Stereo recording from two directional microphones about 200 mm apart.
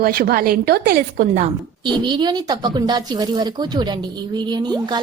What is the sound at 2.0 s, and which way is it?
Speech, 20° right (ahead or behind).